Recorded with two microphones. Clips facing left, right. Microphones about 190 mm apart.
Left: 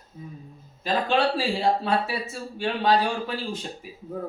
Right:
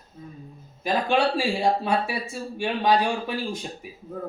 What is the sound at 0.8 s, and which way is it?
Speech, 10° right (ahead or behind).